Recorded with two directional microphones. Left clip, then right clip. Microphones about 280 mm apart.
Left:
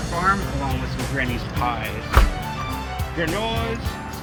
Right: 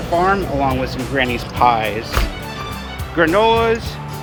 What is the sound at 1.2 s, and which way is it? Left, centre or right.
Speech, centre.